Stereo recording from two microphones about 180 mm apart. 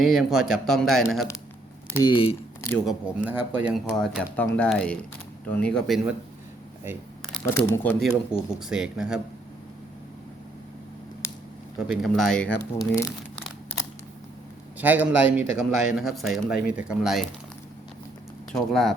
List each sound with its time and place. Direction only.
0.0 s a man's voice: centre (ahead or behind)
1.9 s speech: 20° left (ahead or behind)
2.8 s a man's voice: 5° right (ahead or behind)
7.4 s a man's voice: 10° left (ahead or behind)
11.8 s a man's voice: centre (ahead or behind)
14.8 s a man's voice: 10° right (ahead or behind)
18.5 s a man's voice: centre (ahead or behind)